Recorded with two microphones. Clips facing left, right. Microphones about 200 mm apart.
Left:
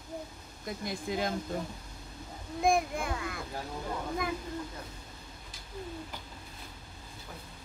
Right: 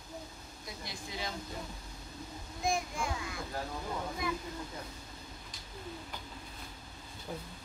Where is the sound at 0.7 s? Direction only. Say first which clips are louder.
Left 10 dB; 50° left (ahead or behind).